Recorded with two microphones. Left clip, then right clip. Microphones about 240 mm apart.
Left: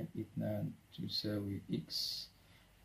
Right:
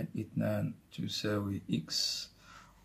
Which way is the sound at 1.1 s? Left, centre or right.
Centre.